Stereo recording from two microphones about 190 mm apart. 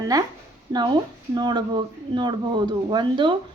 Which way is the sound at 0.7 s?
20° right (ahead or behind).